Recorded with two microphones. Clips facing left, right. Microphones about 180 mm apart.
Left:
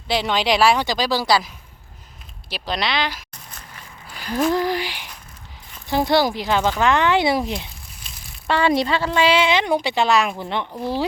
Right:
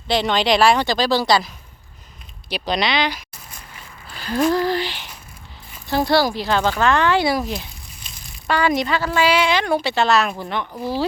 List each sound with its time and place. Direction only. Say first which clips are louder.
0.1 s a woman's voice: right 2 dB; 5° left (ahead or behind)
2.5 s speech: right 3 dB; centre (ahead or behind)
4.1 s a sound: right 2 dB; 15° left (ahead or behind)
4.5 s a woman's voice: right 1 dB; 15° left (ahead or behind)
10.7 s speech: even; 5° right (ahead or behind)